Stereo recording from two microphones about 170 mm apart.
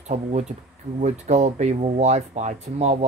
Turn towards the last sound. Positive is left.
turn(degrees=-40)  # may be behind; listen again after turning